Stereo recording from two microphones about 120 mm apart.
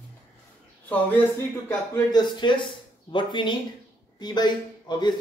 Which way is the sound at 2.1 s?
40° left (ahead or behind).